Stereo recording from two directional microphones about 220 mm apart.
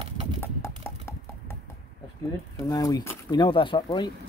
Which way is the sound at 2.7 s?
15° left (ahead or behind).